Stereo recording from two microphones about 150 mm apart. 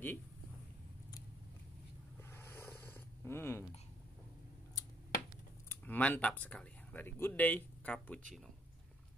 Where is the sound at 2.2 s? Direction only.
15° left (ahead or behind).